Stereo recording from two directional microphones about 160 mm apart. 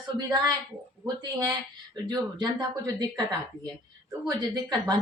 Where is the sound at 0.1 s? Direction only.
25° right (ahead or behind).